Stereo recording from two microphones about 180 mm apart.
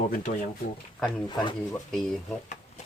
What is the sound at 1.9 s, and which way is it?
Speech, 5° left (ahead or behind).